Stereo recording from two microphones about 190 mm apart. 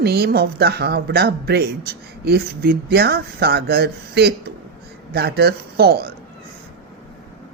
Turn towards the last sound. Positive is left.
turn(degrees=-55)  # may be behind; listen again after turning